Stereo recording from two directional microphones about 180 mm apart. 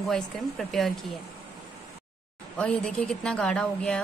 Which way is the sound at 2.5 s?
5° left (ahead or behind).